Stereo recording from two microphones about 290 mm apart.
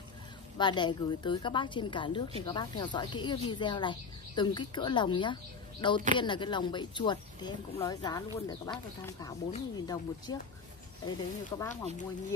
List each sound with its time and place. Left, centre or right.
0.6 s speech: centre